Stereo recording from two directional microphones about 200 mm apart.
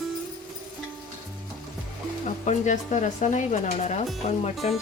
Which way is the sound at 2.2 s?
35° left (ahead or behind).